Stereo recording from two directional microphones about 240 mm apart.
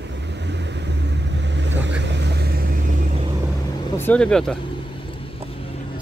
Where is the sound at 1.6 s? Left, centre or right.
Right.